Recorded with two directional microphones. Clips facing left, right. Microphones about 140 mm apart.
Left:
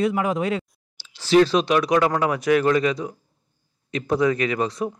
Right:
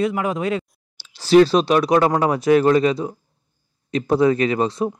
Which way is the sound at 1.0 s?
35° right (ahead or behind).